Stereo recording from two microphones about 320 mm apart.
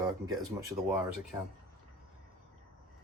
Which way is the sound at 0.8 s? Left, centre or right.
Centre.